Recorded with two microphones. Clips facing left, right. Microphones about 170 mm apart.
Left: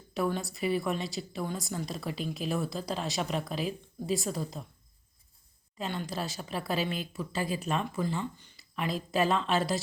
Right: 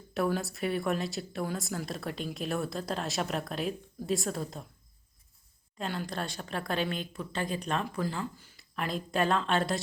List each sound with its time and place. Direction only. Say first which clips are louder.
0.1 s a woman's voice: right 1 dB; centre (ahead or behind)
5.7 s a woman's voice: even; centre (ahead or behind)